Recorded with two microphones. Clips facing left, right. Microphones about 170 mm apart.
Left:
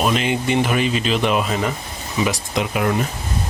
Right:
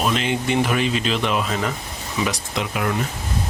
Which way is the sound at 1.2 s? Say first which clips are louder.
Left 3 dB; 15° left (ahead or behind).